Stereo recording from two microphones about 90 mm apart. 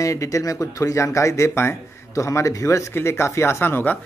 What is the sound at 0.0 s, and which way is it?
Speech, 35° left (ahead or behind).